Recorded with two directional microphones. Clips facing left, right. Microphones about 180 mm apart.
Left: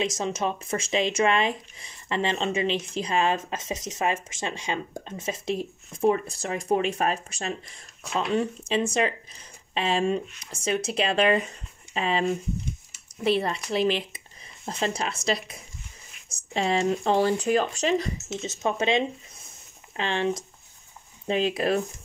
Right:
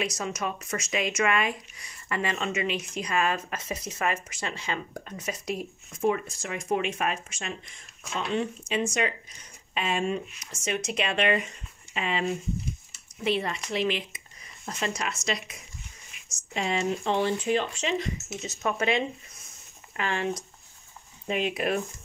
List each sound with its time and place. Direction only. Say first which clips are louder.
0.0 s speech: left 4 dB; 25° left (ahead or behind)
18.4 s speech: left 2 dB; 25° left (ahead or behind)
21.3 s speech: left 3 dB; 30° left (ahead or behind)